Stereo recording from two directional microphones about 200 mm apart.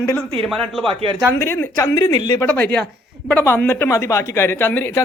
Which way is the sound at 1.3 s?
10° left (ahead or behind).